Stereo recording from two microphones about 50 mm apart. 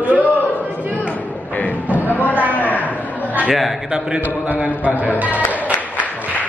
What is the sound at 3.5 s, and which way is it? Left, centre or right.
Speech, centre.